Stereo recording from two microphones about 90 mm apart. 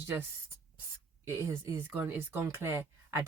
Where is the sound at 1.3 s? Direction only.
30° right (ahead or behind).